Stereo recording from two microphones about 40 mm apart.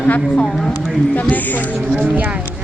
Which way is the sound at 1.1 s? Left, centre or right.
Left.